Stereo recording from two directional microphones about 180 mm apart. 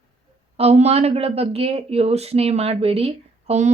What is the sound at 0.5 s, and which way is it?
Speech, 35° right (ahead or behind).